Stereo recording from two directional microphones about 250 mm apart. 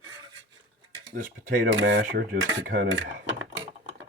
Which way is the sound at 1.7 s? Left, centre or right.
Right.